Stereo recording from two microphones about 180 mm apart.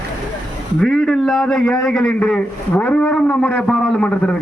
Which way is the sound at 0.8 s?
5° left (ahead or behind).